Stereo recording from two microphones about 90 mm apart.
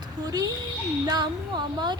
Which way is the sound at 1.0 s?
55° right (ahead or behind).